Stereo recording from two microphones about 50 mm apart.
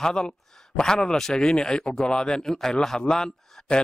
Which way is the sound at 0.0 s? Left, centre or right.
Centre.